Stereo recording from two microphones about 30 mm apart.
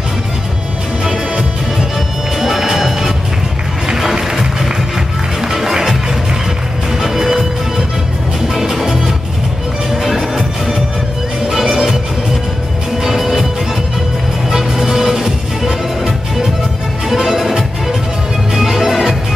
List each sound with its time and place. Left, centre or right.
2.3 s music: centre
7.0 s music: centre
13.0 s music: centre
14.5 s music: centre
17.1 s music: centre